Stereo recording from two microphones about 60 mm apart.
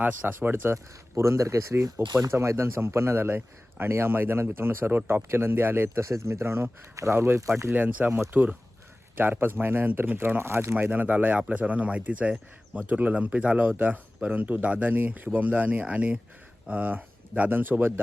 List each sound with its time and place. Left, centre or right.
0.0 s a man's voice: right
7.7 s a man's voice: right
10.8 s speech: right